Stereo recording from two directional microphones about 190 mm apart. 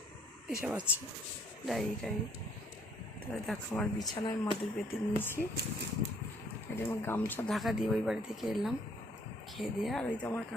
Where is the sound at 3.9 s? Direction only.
20° left (ahead or behind).